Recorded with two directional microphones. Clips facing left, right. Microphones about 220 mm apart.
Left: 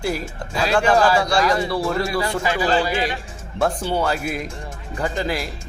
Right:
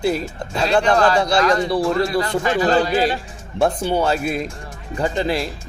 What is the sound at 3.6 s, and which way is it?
Speech, 20° right (ahead or behind).